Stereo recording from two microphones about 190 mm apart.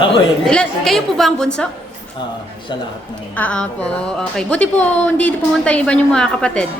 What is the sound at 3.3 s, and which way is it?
A woman's voice, 10° left (ahead or behind).